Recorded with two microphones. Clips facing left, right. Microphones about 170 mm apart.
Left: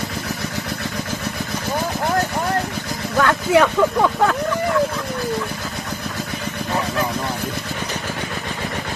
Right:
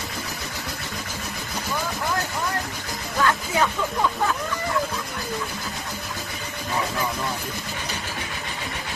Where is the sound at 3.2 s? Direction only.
75° left (ahead or behind).